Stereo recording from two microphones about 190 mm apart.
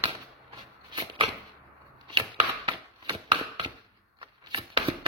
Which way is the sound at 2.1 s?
25° right (ahead or behind).